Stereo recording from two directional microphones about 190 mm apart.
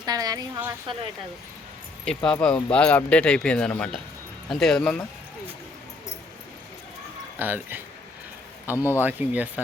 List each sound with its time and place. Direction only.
0.0 s a woman's voice: 20° right (ahead or behind)
2.0 s speech: 5° left (ahead or behind)
7.3 s speech: 10° right (ahead or behind)
8.6 s a man's voice: 15° left (ahead or behind)
9.0 s speech: 10° right (ahead or behind)